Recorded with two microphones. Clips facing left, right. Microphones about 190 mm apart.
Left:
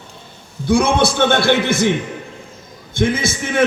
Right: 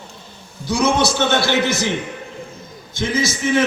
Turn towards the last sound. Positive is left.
turn(degrees=55)  # may be behind; listen again after turning